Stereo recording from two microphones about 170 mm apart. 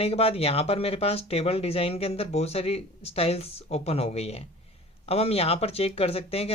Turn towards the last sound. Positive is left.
turn(degrees=35)  # may be behind; listen again after turning